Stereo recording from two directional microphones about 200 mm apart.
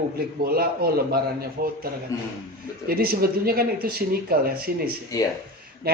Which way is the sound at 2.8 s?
50° right (ahead or behind).